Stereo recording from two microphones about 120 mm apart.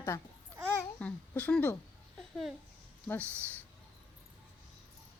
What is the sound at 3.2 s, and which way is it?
Speech, 20° right (ahead or behind).